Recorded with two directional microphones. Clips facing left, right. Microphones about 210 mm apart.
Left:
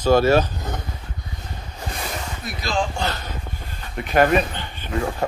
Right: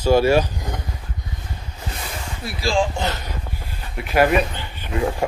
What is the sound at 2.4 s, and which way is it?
Speech, 30° right (ahead or behind).